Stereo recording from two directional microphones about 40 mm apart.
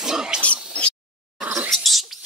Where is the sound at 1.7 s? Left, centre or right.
Centre.